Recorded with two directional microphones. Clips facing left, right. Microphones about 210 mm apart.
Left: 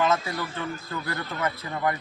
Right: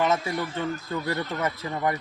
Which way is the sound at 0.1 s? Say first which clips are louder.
Right 1 dB; 25° right (ahead or behind).